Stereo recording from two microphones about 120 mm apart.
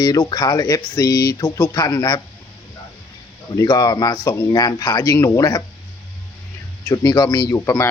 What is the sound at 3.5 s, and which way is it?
Speech, 35° left (ahead or behind).